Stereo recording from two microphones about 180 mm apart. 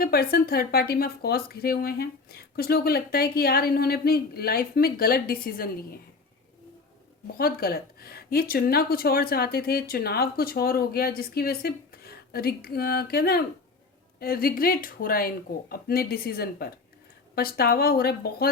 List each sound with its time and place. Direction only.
0.0 s a woman's voice: 60° left (ahead or behind)
7.3 s a woman's voice: 60° left (ahead or behind)